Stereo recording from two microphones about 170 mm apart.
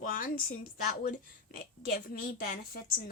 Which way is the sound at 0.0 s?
50° left (ahead or behind).